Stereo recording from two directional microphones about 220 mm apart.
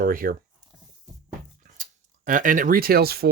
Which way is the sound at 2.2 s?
35° right (ahead or behind).